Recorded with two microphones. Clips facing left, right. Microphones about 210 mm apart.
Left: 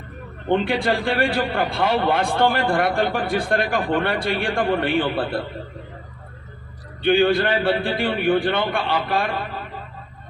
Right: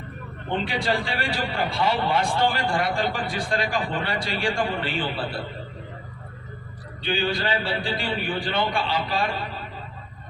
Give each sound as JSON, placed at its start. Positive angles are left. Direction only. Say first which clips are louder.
{"t": 0.4, "sound": "a man's voice", "louder": "left 6 dB", "side_deg": 55}
{"t": 7.0, "sound": "a man's voice", "louder": "left 9 dB", "side_deg": 55}